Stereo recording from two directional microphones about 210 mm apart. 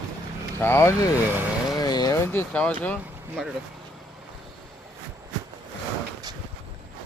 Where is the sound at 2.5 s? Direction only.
5° left (ahead or behind).